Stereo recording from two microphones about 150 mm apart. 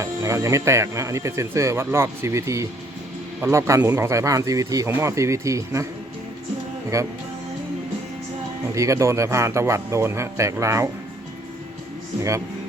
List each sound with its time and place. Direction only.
0.0 s speech: 20° right (ahead or behind)
6.9 s speech: 20° right (ahead or behind)
8.7 s speech: 20° right (ahead or behind)